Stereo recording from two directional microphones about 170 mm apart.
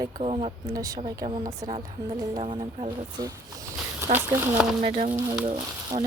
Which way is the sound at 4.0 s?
15° right (ahead or behind).